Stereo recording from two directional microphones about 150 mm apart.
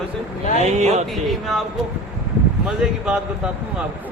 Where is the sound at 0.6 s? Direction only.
50° right (ahead or behind).